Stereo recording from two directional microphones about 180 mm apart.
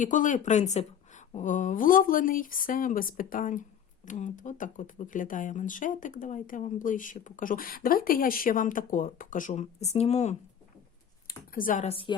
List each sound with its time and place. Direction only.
0.0 s speech: 45° left (ahead or behind)
11.3 s a sound: 50° left (ahead or behind)
11.9 s speech: 30° left (ahead or behind)